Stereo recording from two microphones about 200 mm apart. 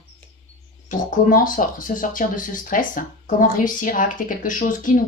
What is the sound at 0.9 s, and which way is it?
Speech, 45° left (ahead or behind).